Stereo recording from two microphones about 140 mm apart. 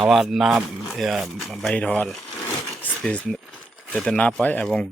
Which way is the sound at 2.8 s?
10° left (ahead or behind).